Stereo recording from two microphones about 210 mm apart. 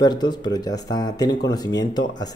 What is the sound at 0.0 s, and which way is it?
Speech, 20° left (ahead or behind).